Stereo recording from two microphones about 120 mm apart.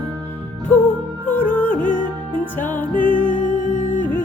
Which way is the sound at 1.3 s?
15° left (ahead or behind).